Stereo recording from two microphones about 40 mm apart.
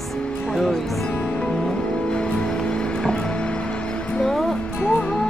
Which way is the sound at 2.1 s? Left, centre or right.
Left.